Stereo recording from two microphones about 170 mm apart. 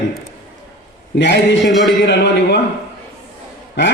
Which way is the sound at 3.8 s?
90° left.